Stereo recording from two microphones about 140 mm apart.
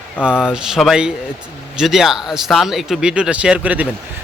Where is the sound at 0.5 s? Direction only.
5° right (ahead or behind).